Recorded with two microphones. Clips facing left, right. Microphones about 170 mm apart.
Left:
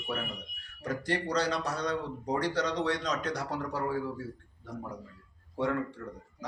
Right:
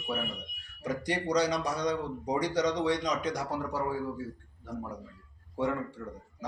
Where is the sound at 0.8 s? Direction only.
10° right (ahead or behind).